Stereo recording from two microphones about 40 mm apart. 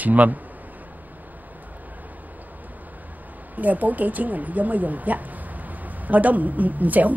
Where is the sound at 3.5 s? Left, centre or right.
Right.